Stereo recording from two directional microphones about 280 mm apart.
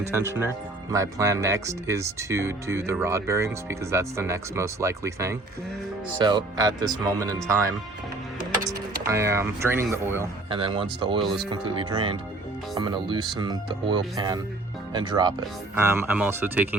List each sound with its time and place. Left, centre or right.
0.1 s speech: centre
8.6 s speech: centre